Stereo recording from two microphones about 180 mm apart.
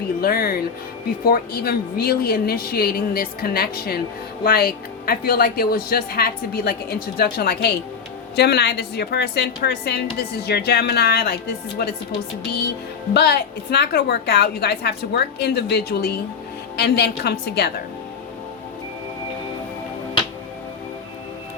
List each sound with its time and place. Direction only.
0.2 s a woman's voice: 55° left (ahead or behind)